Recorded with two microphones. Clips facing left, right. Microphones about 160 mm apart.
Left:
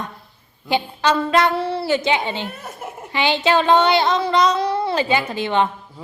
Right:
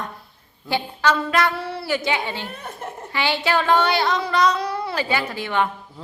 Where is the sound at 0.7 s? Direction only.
25° left (ahead or behind).